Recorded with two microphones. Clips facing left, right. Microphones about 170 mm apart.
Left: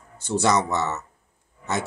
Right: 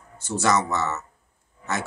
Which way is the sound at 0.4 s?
15° left (ahead or behind).